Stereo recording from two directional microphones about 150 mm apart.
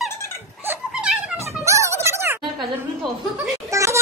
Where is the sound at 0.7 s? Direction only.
5° right (ahead or behind).